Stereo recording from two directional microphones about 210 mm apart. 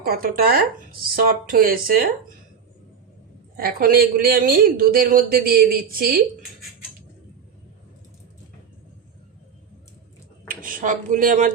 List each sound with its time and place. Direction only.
0.0 s speech: 45° right (ahead or behind)
3.6 s speech: 45° right (ahead or behind)
10.5 s speech: 40° right (ahead or behind)